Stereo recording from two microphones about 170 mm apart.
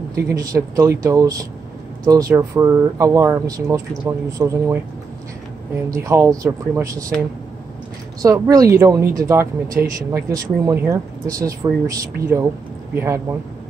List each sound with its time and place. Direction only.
0.1 s speech: 20° right (ahead or behind)
5.9 s speech: 20° right (ahead or behind)
8.2 s speech: 20° right (ahead or behind)